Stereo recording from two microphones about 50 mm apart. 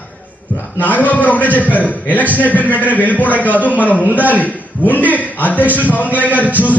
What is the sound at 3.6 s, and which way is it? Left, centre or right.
A man's voice, left.